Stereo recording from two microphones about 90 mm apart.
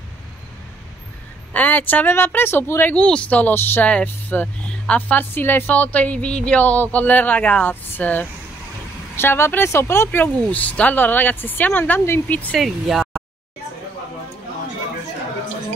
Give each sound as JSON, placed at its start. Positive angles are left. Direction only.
{"t": 1.5, "sound": "speech", "side_deg": 20}
{"t": 3.0, "sound": "speech", "side_deg": 10}
{"t": 12.5, "sound": "speech", "side_deg": -5}